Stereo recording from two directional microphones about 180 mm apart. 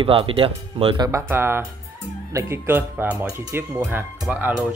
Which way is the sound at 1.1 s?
15° right (ahead or behind).